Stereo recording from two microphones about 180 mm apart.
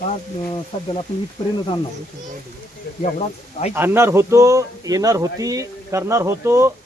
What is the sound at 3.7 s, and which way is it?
A man's voice, 15° right (ahead or behind).